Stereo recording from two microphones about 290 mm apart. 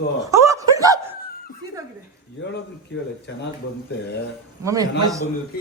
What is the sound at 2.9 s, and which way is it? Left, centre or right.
Speech, left.